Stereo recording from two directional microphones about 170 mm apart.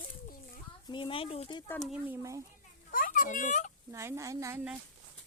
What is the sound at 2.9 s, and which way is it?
Speech, 55° left (ahead or behind).